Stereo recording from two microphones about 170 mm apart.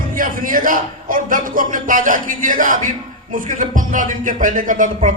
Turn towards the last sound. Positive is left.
turn(degrees=-50)  # may be behind; listen again after turning